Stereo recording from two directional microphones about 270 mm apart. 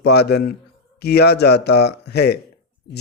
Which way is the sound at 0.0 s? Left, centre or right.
Left.